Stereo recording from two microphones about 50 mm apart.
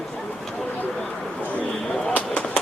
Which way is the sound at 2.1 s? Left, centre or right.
Left.